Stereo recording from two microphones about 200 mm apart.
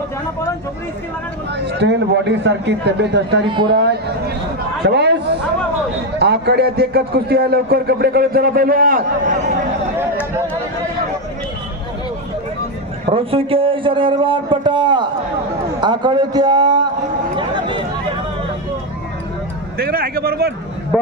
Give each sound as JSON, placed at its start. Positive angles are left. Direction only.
{"t": 1.5, "sound": "a man's voice", "side_deg": -60}
{"t": 3.4, "sound": "a man's voice", "side_deg": -25}
{"t": 3.7, "sound": "a man's voice", "side_deg": -55}
{"t": 13.1, "sound": "a man's voice", "side_deg": -30}
{"t": 17.3, "sound": "a sound", "side_deg": -25}
{"t": 19.7, "sound": "speech", "side_deg": -50}